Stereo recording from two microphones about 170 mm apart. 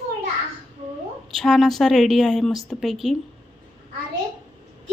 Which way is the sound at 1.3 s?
Centre (ahead or behind).